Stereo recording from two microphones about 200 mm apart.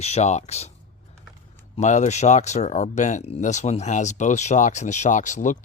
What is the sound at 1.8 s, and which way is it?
Speech, 35° left (ahead or behind).